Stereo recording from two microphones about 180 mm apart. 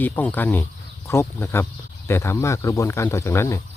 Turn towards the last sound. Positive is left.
turn(degrees=15)  # may be behind; listen again after turning